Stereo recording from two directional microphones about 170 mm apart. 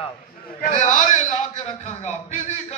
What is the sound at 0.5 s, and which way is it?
A man's voice, 45° left (ahead or behind).